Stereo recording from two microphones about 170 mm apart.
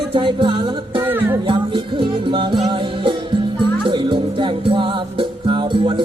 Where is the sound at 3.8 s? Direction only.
30° right (ahead or behind).